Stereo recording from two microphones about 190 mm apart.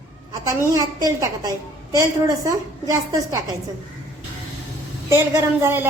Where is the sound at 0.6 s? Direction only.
15° right (ahead or behind).